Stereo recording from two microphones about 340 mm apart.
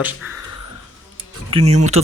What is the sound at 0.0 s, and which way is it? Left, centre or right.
Speech, centre.